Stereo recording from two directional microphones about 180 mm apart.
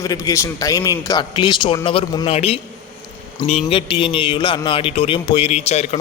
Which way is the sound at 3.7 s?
30° left (ahead or behind).